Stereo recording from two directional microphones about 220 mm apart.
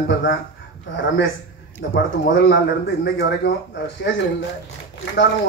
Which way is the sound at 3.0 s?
50° left (ahead or behind).